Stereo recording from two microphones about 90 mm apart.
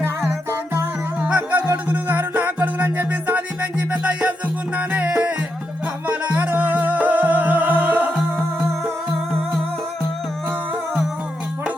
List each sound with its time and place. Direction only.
1.2 s music: 15° right (ahead or behind)